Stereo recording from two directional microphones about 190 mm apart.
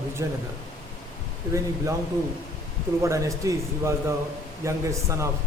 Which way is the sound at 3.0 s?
15° right (ahead or behind).